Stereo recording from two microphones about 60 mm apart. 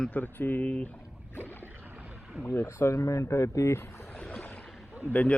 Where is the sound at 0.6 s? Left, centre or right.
Centre.